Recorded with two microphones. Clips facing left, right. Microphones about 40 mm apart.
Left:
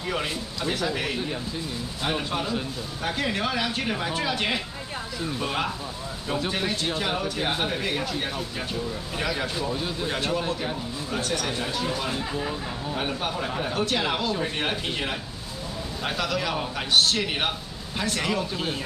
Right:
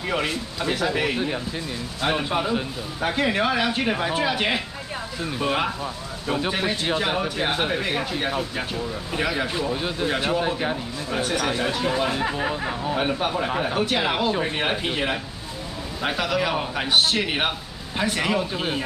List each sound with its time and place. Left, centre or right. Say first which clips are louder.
0.1 s a man's voice: right 4 dB; centre